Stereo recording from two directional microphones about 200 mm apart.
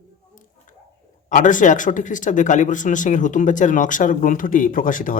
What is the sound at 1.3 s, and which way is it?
Speech, 40° left (ahead or behind).